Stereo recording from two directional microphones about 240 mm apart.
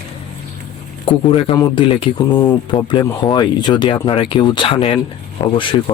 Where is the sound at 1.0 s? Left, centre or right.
Left.